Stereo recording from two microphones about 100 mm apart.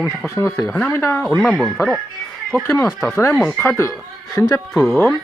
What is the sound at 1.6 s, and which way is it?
Speech, 5° left (ahead or behind).